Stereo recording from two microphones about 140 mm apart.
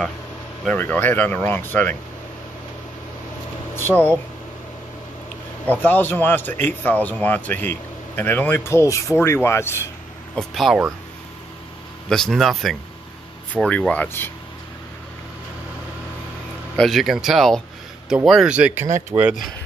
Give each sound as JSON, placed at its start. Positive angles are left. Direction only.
{"t": 0.7, "sound": "speech", "side_deg": 15}
{"t": 3.7, "sound": "speech", "side_deg": 15}
{"t": 5.7, "sound": "speech", "side_deg": 15}
{"t": 10.3, "sound": "speech", "side_deg": 0}
{"t": 12.1, "sound": "speech", "side_deg": 0}
{"t": 13.7, "sound": "speech", "side_deg": 10}
{"t": 16.7, "sound": "speech", "side_deg": 0}